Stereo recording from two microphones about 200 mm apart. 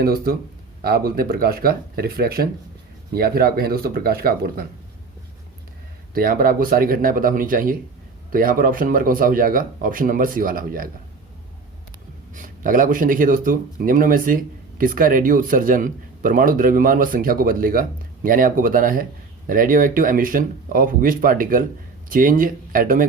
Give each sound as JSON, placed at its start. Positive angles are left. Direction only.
{"t": 0.0, "sound": "speech", "side_deg": -50}
{"t": 6.1, "sound": "speech", "side_deg": -45}
{"t": 12.3, "sound": "speech", "side_deg": -40}